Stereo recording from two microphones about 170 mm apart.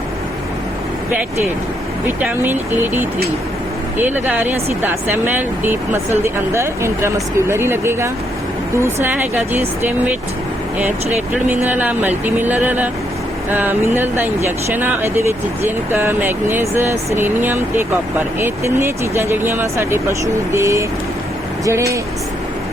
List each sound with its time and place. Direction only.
2.0 s speech: 10° right (ahead or behind)
11.4 s speech: 10° right (ahead or behind)